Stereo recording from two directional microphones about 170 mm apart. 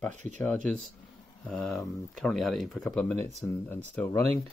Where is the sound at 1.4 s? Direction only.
5° left (ahead or behind).